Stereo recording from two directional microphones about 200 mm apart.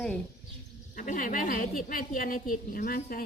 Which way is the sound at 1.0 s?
40° left (ahead or behind).